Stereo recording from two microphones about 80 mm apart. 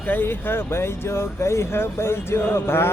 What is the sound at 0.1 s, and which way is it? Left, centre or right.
A man's voice, left.